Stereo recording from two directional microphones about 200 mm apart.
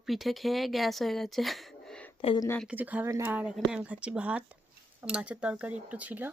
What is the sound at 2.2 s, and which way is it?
Speech, 30° left (ahead or behind).